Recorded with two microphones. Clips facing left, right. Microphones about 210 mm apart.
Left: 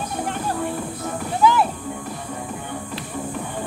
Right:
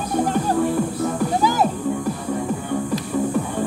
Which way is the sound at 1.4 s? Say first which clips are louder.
Left 4 dB; 40° right (ahead or behind).